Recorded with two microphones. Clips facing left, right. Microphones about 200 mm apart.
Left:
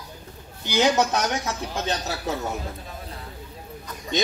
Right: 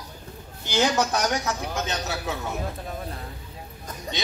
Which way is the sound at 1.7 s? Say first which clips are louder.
Left 2 dB; 35° left (ahead or behind).